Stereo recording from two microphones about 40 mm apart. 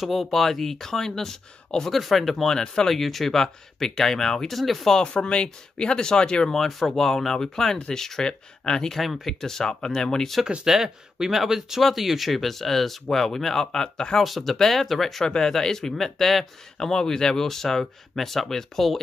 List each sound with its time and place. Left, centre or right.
0.0 s speech: centre
2.0 s speech: centre
2.4 s speech: centre
2.9 s speech: centre
4.6 s speech: centre
4.9 s speech: left
6.5 s speech: centre
8.9 s speech: centre
10.4 s speech: centre
10.7 s speech: centre
14.2 s speech: centre
15.2 s speech: centre
16.7 s speech: centre